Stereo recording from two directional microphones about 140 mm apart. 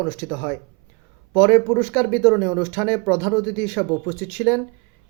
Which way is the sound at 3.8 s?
5° right (ahead or behind).